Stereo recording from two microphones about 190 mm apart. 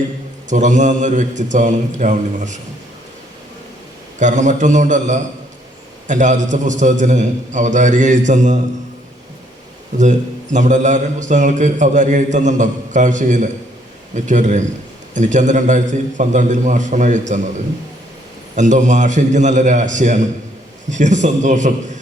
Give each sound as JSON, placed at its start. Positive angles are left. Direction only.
{"t": 0.5, "sound": "a man's voice", "side_deg": -40}
{"t": 4.2, "sound": "a man's voice", "side_deg": -40}
{"t": 10.0, "sound": "a man's voice", "side_deg": -40}
{"t": 18.5, "sound": "a man's voice", "side_deg": -40}